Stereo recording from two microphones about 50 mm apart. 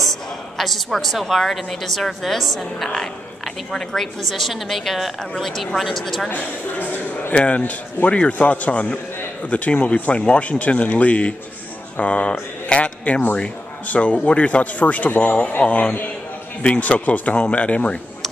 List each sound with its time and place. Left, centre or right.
0.0 s a woman's voice: centre
4.3 s a woman's voice: centre
6.3 s speech: left
7.3 s a man's voice: left